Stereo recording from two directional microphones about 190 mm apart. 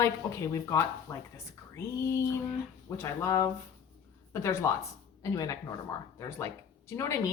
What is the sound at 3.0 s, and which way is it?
A woman's voice, 15° left (ahead or behind).